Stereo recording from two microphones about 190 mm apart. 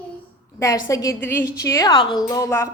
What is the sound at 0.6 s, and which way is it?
A woman's voice, 15° left (ahead or behind).